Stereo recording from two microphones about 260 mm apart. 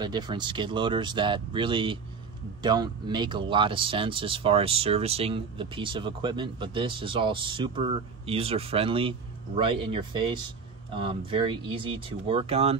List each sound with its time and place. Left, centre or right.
0.0 s speech: centre